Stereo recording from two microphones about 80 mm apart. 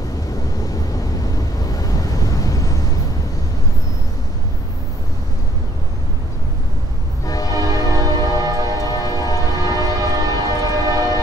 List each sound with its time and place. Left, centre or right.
1.7 s vehicle: left
7.2 s train: left
7.5 s train: right
8.8 s train: left
9.6 s train: right